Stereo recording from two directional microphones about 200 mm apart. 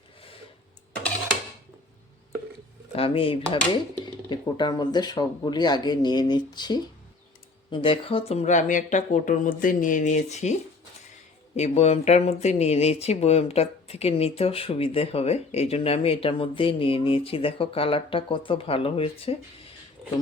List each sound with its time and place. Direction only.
2.9 s speech: 30° left (ahead or behind)